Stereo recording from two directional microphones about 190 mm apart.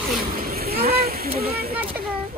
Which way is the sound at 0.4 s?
50° right (ahead or behind).